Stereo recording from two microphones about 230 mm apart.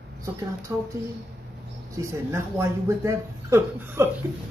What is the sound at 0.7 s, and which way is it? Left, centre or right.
Speech, centre.